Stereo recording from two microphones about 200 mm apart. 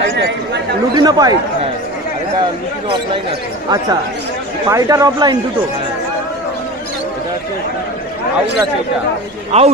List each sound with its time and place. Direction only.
0.9 s speech: 20° right (ahead or behind)
4.6 s speech: 15° right (ahead or behind)
9.5 s speech: 30° right (ahead or behind)